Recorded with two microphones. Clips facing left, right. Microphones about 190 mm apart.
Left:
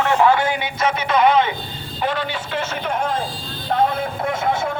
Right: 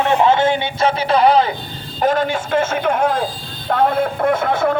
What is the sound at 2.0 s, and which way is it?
A man's voice, 45° right (ahead or behind).